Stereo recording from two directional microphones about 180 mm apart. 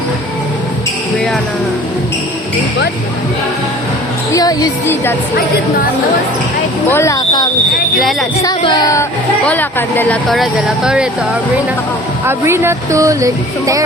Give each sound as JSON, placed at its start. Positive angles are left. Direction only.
{"t": 4.3, "sound": "a woman's voice", "side_deg": 20}
{"t": 6.9, "sound": "speech", "side_deg": 15}
{"t": 7.9, "sound": "speech", "side_deg": 0}
{"t": 8.4, "sound": "speech", "side_deg": 20}
{"t": 12.2, "sound": "speech", "side_deg": -15}